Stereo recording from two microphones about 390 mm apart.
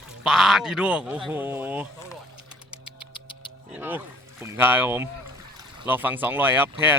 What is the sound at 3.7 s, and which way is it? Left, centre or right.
Speech, centre.